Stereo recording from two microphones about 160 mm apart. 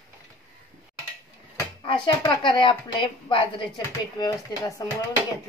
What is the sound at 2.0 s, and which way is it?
A woman's voice, 25° left (ahead or behind).